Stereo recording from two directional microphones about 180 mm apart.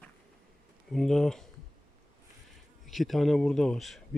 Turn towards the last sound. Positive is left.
turn(degrees=0)  # may be behind; listen again after turning